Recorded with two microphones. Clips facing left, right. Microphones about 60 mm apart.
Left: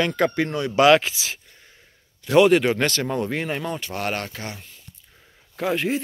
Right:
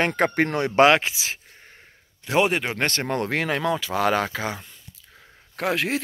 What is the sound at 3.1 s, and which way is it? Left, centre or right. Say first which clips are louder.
Speech: right 1 dB; right.